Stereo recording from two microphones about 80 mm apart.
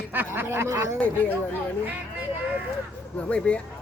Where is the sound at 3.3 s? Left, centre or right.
Centre.